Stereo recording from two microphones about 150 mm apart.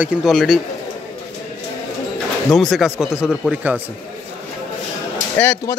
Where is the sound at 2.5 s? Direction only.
Centre (ahead or behind).